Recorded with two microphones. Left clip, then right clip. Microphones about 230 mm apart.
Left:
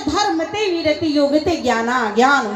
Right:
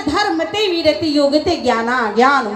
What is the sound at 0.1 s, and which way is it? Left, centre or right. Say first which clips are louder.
Speech: right 2 dB; centre.